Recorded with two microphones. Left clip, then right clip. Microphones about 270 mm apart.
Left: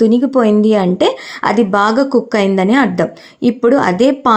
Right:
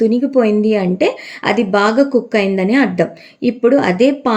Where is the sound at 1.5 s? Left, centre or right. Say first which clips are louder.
Even; centre.